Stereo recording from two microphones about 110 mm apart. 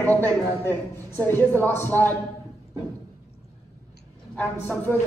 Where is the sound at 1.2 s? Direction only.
20° left (ahead or behind).